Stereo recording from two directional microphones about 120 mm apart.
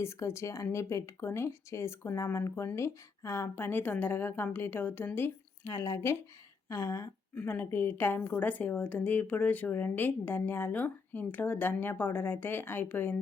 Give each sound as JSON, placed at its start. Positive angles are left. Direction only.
{"t": 0.0, "sound": "a woman's voice", "side_deg": 20}